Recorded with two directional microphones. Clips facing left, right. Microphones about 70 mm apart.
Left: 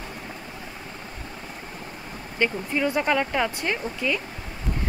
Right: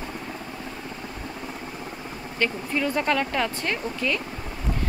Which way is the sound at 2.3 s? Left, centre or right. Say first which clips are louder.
Left 1 dB; centre.